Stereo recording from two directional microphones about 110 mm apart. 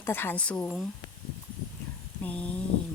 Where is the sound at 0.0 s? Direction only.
20° left (ahead or behind).